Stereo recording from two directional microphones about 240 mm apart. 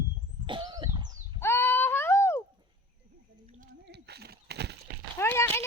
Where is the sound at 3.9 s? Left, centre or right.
Right.